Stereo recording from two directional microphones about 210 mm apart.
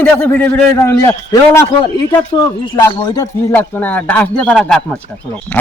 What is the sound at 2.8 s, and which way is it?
Speech, 15° left (ahead or behind).